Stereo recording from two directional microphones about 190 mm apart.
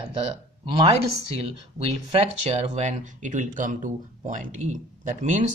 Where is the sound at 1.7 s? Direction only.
35° right (ahead or behind).